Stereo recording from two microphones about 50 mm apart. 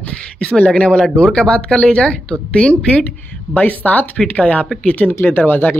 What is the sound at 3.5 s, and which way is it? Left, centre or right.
Speech, left.